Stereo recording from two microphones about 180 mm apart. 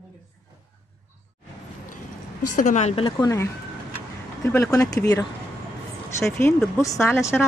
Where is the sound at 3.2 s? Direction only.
20° left (ahead or behind).